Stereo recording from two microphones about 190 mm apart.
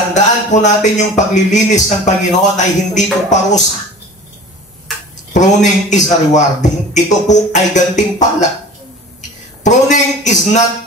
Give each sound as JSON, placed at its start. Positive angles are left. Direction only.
{"t": 0.1, "sound": "a man's voice", "side_deg": 40}
{"t": 5.3, "sound": "a man's voice", "side_deg": 40}
{"t": 9.6, "sound": "a man's voice", "side_deg": 40}